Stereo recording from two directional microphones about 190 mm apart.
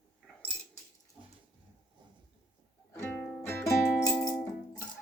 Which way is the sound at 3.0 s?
5° left (ahead or behind).